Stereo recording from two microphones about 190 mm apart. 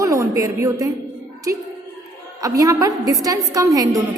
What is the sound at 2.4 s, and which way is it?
A woman's voice, 20° right (ahead or behind).